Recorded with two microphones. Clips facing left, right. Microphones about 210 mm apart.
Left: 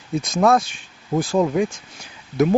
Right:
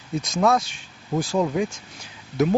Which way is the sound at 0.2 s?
55° left (ahead or behind).